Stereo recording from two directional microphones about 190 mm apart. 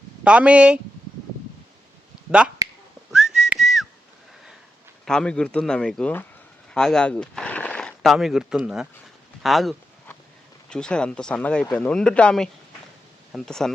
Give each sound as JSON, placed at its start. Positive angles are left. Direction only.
{"t": 0.3, "sound": "speech", "side_deg": -5}
{"t": 2.6, "sound": "whistling", "side_deg": -20}
{"t": 3.1, "sound": "whistling", "side_deg": -5}
{"t": 5.0, "sound": "speech", "side_deg": 5}